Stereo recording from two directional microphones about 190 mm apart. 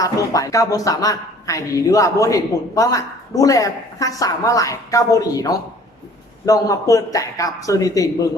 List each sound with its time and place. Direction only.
0.0 s a woman's voice: 20° left (ahead or behind)